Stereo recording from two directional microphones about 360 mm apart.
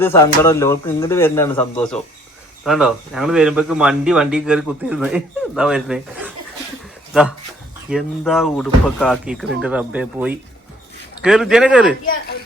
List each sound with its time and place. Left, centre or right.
0.0 s a man's voice: centre